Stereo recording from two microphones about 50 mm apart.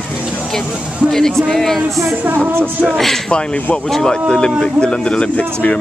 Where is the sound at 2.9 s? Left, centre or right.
Centre.